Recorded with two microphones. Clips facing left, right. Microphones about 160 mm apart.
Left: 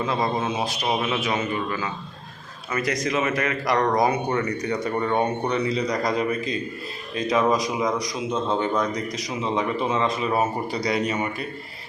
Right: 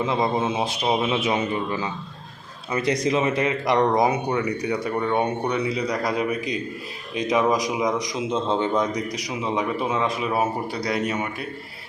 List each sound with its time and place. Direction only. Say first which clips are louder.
0.0 s a man's voice: right 2 dB; 20° right (ahead or behind)
9.0 s a man's voice: even; 10° right (ahead or behind)